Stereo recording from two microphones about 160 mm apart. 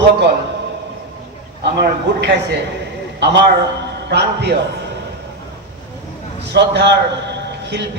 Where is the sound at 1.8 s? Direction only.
90° right.